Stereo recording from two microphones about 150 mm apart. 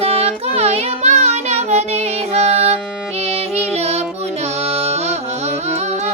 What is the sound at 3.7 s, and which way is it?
Music, 45° right (ahead or behind).